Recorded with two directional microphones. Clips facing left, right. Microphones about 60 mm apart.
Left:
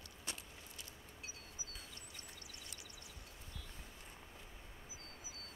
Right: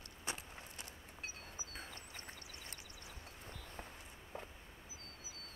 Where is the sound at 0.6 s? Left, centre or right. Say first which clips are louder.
Right 3 dB; right.